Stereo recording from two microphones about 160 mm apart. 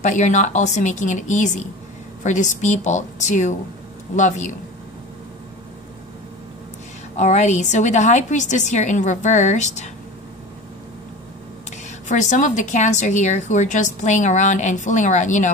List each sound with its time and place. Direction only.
0.0 s a woman's voice: 50° left (ahead or behind)
7.2 s a woman's voice: 45° left (ahead or behind)
12.1 s a woman's voice: 50° left (ahead or behind)